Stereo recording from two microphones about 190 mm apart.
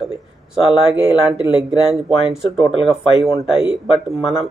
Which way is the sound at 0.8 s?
5° right (ahead or behind).